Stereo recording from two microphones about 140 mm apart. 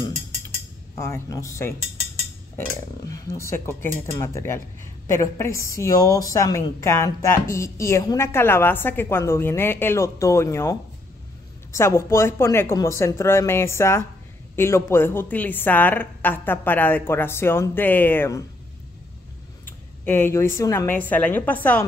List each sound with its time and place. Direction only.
0.9 s a woman's voice: 20° left (ahead or behind)
19.6 s a woman's voice: 15° left (ahead or behind)